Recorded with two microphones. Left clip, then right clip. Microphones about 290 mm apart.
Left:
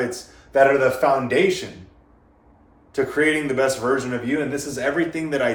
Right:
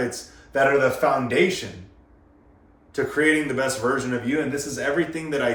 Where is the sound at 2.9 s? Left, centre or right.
Centre.